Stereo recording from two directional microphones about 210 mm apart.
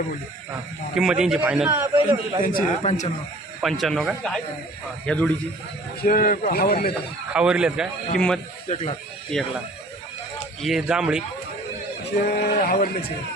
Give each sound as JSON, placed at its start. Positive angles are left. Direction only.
{"t": 0.9, "sound": "a man's voice", "side_deg": -5}
{"t": 2.4, "sound": "a man's voice", "side_deg": 40}
{"t": 3.6, "sound": "a man's voice", "side_deg": 0}
{"t": 6.0, "sound": "a man's voice", "side_deg": 40}
{"t": 7.3, "sound": "a man's voice", "side_deg": -5}
{"t": 8.7, "sound": "speech", "side_deg": 25}
{"t": 10.6, "sound": "a man's voice", "side_deg": 0}
{"t": 12.2, "sound": "a man's voice", "side_deg": 45}